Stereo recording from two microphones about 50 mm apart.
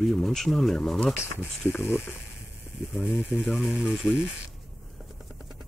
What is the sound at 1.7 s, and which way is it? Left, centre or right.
Speech, left.